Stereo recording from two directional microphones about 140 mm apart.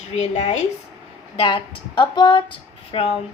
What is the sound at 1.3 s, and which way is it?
Speech, 40° left (ahead or behind).